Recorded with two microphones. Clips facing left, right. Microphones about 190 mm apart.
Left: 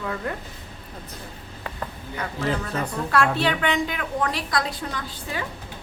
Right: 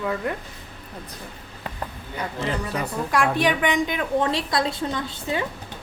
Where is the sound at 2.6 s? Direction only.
15° right (ahead or behind).